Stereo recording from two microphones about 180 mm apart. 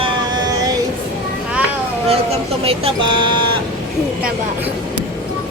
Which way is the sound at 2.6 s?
30° right (ahead or behind).